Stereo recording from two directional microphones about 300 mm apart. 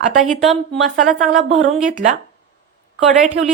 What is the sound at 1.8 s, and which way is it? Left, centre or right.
Speech, right.